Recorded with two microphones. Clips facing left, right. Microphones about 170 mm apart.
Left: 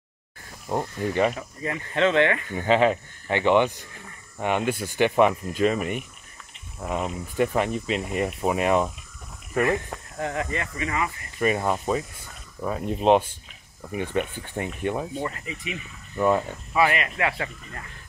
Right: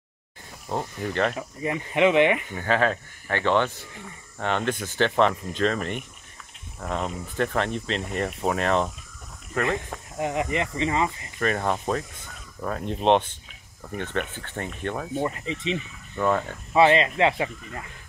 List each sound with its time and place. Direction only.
0.7 s speech: 15° left (ahead or behind)
1.6 s speech: 15° right (ahead or behind)
2.5 s speech: 20° left (ahead or behind)
10.1 s speech: 15° right (ahead or behind)
11.3 s speech: 10° left (ahead or behind)
15.1 s speech: 20° right (ahead or behind)
16.2 s speech: 10° left (ahead or behind)
16.7 s speech: 25° right (ahead or behind)